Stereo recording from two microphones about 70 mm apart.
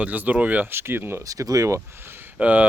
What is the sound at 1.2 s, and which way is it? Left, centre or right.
Speech, right.